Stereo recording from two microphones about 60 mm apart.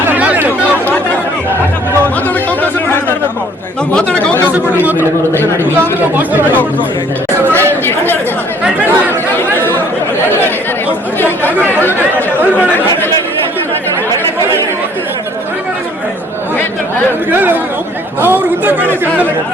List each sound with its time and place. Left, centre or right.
0.3 s chatter: right
3.9 s a sound: centre
4.8 s a sound: right
5.7 s chatter: right
7.9 s chatter: left
9.6 s chatter: left
11.8 s chatter: left
17.3 s chatter: right